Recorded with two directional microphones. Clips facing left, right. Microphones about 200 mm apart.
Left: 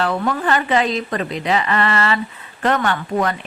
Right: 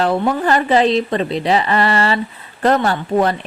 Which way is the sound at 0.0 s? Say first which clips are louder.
Right 4 dB; 30° right (ahead or behind).